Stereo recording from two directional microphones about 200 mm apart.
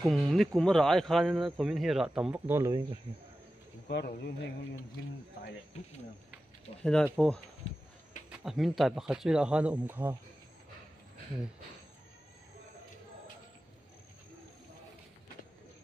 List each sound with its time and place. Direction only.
0.0 s speech: centre (ahead or behind)
3.9 s speech: 55° left (ahead or behind)
6.8 s speech: 5° left (ahead or behind)
8.3 s speech: centre (ahead or behind)